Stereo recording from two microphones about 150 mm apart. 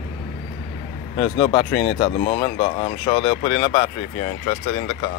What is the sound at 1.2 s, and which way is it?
Speech, 35° left (ahead or behind).